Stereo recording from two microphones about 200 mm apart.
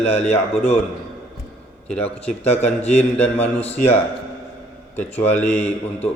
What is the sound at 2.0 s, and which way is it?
A man's voice, 30° left (ahead or behind).